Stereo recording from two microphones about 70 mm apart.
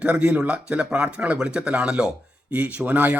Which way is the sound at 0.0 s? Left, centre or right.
Centre.